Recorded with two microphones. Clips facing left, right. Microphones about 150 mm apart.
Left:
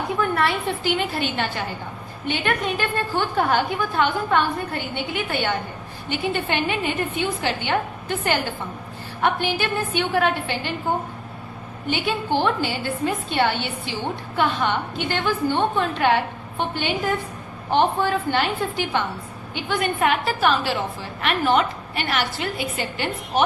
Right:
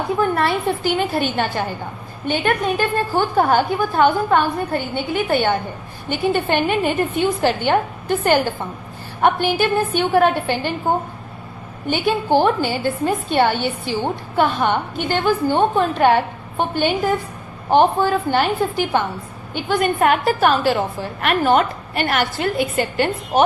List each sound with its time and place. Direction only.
0.2 s a woman's voice: 40° right (ahead or behind)
11.9 s a woman's voice: 45° right (ahead or behind)